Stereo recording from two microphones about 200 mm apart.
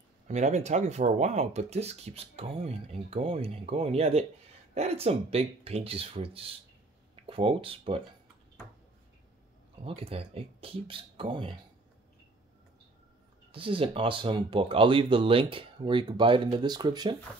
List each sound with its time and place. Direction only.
0.3 s speech: 35° right (ahead or behind)
9.8 s speech: 30° right (ahead or behind)
13.5 s speech: 25° right (ahead or behind)